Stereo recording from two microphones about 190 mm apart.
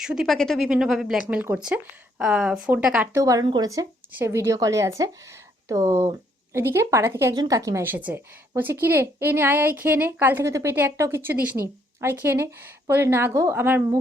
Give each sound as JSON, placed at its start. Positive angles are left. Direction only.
{"t": 0.0, "sound": "speech", "side_deg": -5}